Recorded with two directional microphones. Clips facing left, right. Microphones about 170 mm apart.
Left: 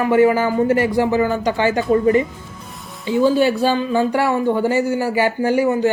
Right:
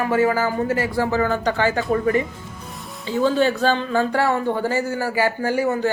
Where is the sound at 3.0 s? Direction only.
10° left (ahead or behind).